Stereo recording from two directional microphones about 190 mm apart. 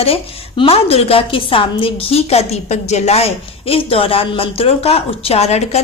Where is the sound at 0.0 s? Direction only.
30° left (ahead or behind).